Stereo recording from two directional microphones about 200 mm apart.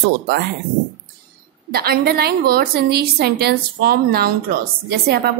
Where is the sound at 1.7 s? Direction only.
50° right (ahead or behind).